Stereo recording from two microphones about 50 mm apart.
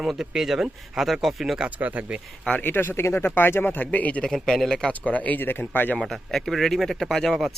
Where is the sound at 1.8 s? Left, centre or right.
Right.